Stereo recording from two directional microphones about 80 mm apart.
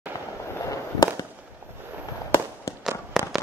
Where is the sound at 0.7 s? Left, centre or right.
Left.